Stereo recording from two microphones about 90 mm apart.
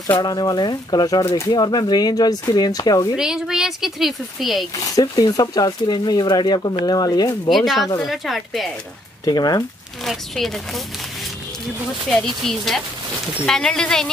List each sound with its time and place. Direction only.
0.2 s speech: 50° left (ahead or behind)
3.2 s speech: 5° right (ahead or behind)
4.9 s speech: 50° left (ahead or behind)
7.4 s speech: centre (ahead or behind)
9.2 s speech: 50° left (ahead or behind)
10.0 s speech: centre (ahead or behind)
12.1 s speech: 5° left (ahead or behind)